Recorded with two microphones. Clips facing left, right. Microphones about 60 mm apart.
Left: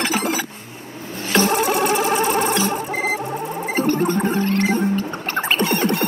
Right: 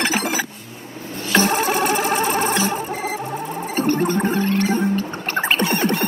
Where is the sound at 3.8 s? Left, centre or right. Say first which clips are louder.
Right 1 dB; right.